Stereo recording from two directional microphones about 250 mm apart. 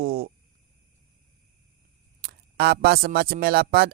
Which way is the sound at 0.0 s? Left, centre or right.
Right.